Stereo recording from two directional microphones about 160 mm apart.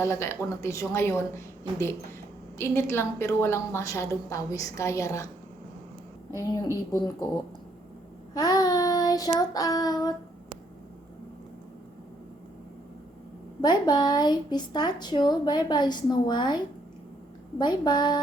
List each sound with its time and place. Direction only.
0.0 s a woman's voice: 15° left (ahead or behind)
6.9 s a woman's voice: 25° left (ahead or behind)
8.3 s child singing: 25° left (ahead or behind)
9.4 s a woman's voice: 25° left (ahead or behind)
13.6 s a woman's voice: 25° left (ahead or behind)
17.6 s a woman's voice: 25° left (ahead or behind)